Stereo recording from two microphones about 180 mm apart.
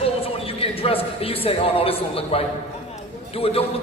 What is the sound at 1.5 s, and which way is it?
A man's voice, 30° left (ahead or behind).